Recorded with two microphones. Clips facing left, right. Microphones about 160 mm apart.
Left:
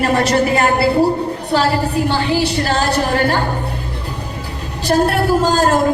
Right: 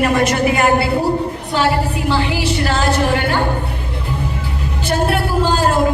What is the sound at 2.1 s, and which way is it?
A woman's voice, 35° left (ahead or behind).